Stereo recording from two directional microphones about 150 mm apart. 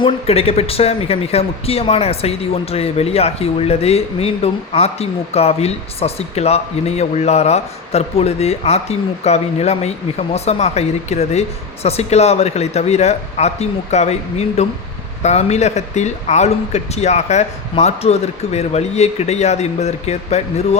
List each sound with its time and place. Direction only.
0.0 s a man's voice: 40° left (ahead or behind)